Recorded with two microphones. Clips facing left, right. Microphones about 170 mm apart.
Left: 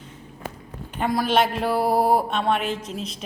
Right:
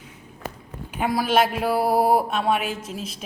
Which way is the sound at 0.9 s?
5° right (ahead or behind).